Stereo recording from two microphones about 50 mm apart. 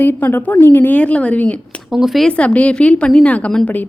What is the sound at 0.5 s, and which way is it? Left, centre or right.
Speech, left.